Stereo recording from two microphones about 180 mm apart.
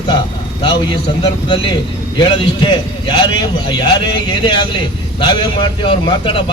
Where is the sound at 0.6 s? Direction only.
30° left (ahead or behind).